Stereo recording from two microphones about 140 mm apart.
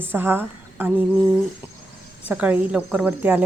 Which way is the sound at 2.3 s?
10° right (ahead or behind).